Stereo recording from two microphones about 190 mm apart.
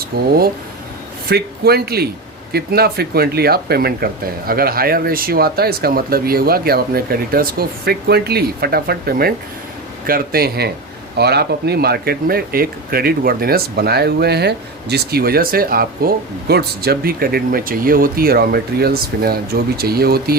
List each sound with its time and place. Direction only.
0.0 s speech: 50° right (ahead or behind)